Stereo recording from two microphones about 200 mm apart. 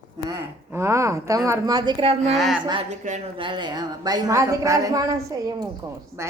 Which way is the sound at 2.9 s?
35° right (ahead or behind).